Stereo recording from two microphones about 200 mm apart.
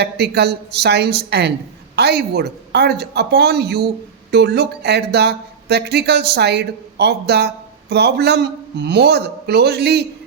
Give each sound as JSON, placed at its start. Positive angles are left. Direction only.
{"t": 0.0, "sound": "speech", "side_deg": -55}